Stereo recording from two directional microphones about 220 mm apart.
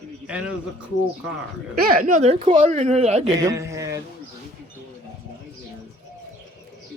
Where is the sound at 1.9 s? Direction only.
40° right (ahead or behind).